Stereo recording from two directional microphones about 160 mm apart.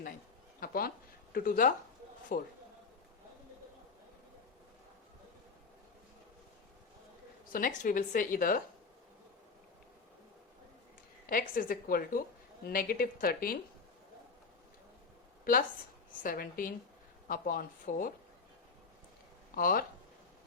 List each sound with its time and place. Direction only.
0.6 s a woman's voice: 65° left (ahead or behind)
7.5 s a woman's voice: 55° left (ahead or behind)
11.3 s a woman's voice: 65° left (ahead or behind)
16.2 s a woman's voice: 60° left (ahead or behind)
19.5 s a woman's voice: 60° left (ahead or behind)